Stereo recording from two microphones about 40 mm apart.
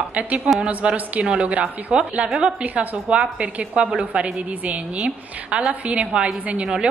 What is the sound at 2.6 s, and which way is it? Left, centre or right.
Speech, right.